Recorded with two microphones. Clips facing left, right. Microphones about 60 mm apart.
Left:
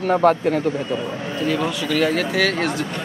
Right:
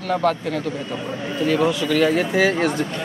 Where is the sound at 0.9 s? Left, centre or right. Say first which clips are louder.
Left 2 dB; centre.